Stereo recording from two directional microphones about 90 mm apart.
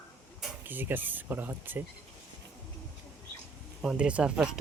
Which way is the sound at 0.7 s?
20° right (ahead or behind).